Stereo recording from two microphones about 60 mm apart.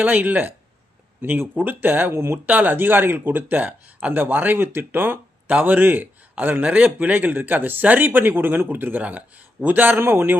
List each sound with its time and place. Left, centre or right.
0.0 s speech: right
2.5 s speech: right